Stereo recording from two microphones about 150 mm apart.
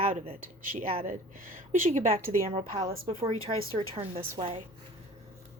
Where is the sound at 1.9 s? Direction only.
45° right (ahead or behind).